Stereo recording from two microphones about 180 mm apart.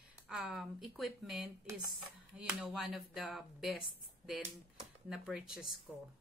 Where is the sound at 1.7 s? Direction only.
15° right (ahead or behind).